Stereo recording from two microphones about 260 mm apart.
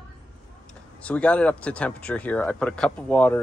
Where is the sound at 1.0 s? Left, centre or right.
Centre.